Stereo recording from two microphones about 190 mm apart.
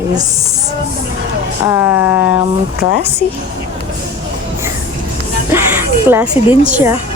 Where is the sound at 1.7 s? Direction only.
15° right (ahead or behind).